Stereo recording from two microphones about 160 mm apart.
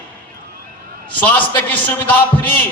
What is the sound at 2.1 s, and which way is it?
Speech, 10° left (ahead or behind).